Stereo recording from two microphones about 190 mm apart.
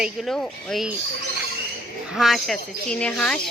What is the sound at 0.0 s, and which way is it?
Speech, centre (ahead or behind).